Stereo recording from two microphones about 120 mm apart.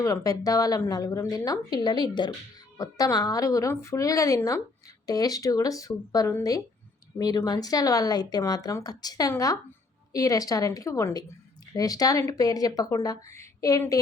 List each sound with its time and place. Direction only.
0.0 s a woman's voice: 30° left (ahead or behind)